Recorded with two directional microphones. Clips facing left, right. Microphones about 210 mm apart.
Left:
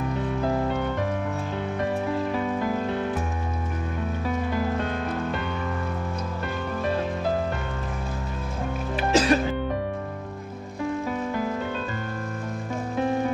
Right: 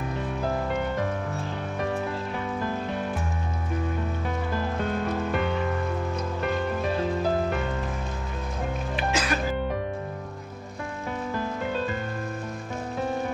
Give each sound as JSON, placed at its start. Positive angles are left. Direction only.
{"t": 8.9, "sound": "music", "side_deg": 35}